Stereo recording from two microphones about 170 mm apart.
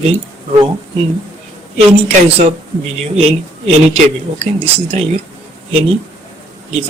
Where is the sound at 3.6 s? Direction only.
35° right (ahead or behind).